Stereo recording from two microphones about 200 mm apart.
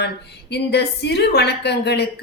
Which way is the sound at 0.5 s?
55° left (ahead or behind).